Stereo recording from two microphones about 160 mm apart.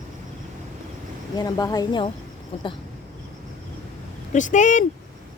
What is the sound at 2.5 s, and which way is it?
Speech, 35° left (ahead or behind).